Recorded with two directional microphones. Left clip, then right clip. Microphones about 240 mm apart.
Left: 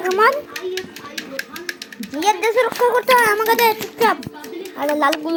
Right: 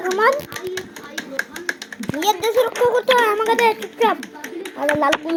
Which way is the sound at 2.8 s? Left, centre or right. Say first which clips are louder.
Left 2 dB; centre.